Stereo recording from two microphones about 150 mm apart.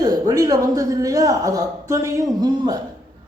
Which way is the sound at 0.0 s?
25° right (ahead or behind).